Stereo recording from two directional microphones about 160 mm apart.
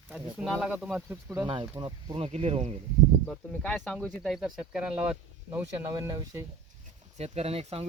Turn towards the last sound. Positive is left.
turn(degrees=-40)  # may be behind; listen again after turning